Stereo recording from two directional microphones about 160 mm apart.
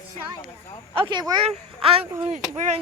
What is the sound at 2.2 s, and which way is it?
Speech, 45° right (ahead or behind).